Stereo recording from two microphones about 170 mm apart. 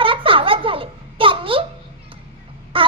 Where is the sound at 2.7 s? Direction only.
30° right (ahead or behind).